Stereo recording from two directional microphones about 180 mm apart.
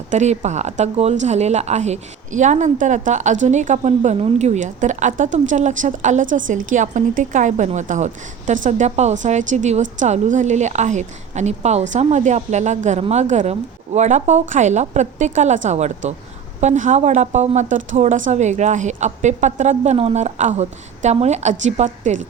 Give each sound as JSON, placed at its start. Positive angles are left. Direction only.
{"t": 0.1, "sound": "a woman's voice", "side_deg": -40}